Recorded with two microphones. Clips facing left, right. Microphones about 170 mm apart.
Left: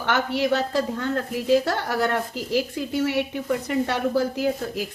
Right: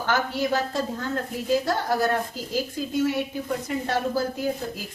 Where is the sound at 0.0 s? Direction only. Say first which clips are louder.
Left 2 dB; 75° left (ahead or behind).